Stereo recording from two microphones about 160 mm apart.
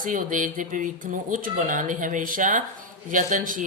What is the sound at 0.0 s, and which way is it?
Speech, 55° right (ahead or behind).